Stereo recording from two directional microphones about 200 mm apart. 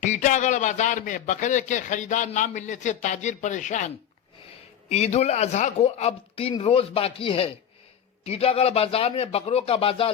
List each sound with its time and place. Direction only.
0.0 s a man's voice: 35° left (ahead or behind)